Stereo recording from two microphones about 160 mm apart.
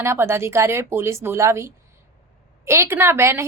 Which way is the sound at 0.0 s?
15° right (ahead or behind).